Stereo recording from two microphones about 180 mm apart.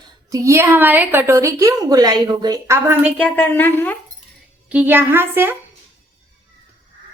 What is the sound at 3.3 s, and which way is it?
Speech, 10° left (ahead or behind).